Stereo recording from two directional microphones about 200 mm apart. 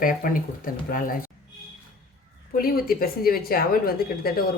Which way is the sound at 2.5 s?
45° left (ahead or behind).